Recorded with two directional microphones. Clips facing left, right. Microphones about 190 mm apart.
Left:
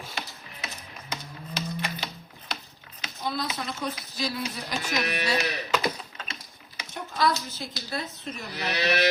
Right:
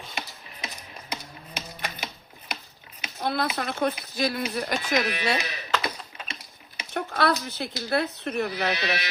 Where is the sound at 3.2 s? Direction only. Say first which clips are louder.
Right 4 dB; 60° right (ahead or behind).